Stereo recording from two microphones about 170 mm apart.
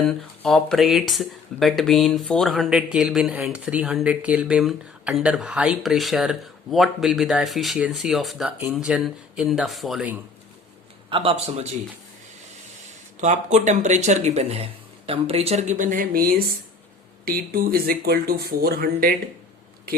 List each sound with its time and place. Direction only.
0.0 s speech: centre (ahead or behind)
11.1 s a man's voice: 35° right (ahead or behind)
13.1 s speech: 45° right (ahead or behind)